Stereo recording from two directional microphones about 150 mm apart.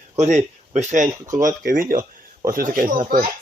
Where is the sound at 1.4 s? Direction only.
65° right (ahead or behind).